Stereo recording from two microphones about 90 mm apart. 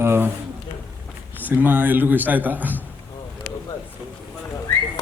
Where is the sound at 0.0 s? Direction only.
25° right (ahead or behind).